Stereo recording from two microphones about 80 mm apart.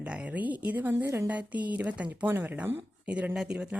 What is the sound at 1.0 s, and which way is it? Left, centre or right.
Speech, right.